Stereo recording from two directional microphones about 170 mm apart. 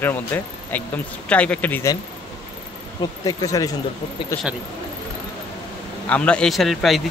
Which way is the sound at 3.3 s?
20° left (ahead or behind).